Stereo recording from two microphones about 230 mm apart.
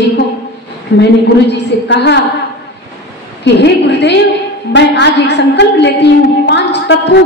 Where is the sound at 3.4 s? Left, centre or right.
Left.